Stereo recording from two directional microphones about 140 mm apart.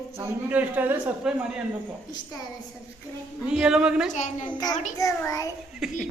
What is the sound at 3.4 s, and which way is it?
Speech, 5° right (ahead or behind).